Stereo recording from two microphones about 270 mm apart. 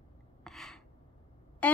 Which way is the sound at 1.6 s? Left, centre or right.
Centre.